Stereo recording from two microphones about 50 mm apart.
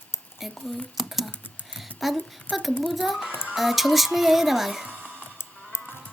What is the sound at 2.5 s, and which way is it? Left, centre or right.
Speech, left.